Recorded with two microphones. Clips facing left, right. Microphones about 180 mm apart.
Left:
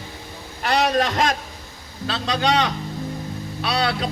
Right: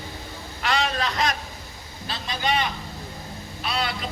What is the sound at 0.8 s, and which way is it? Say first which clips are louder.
Speech: left 8 dB; 45° left (ahead or behind).